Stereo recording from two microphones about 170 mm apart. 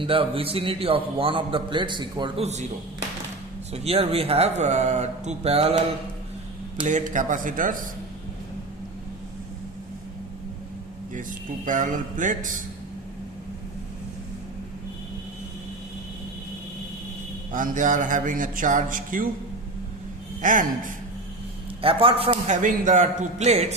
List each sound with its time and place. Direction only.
0.0 s a man's voice: 30° right (ahead or behind)
3.7 s a man's voice: 35° right (ahead or behind)
6.8 s a man's voice: 50° right (ahead or behind)
11.1 s a man's voice: 50° right (ahead or behind)
17.5 s a man's voice: 50° right (ahead or behind)
20.4 s a man's voice: 50° right (ahead or behind)
21.8 s a man's voice: 35° right (ahead or behind)